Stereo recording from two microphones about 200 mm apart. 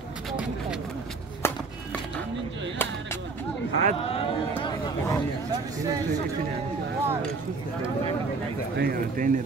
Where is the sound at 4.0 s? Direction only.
30° left (ahead or behind).